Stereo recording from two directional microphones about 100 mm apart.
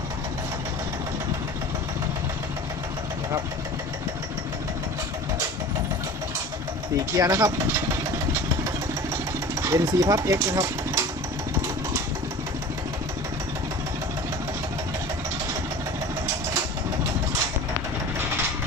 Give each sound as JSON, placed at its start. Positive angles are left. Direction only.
{"t": 7.2, "sound": "speech", "side_deg": -35}
{"t": 9.6, "sound": "speech", "side_deg": -35}